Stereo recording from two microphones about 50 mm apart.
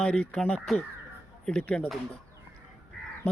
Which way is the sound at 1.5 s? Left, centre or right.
Centre.